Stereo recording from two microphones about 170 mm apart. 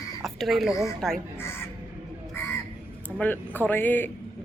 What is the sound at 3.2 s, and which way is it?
Speech, 10° left (ahead or behind).